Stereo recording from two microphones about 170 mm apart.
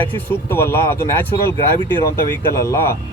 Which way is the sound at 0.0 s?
10° left (ahead or behind).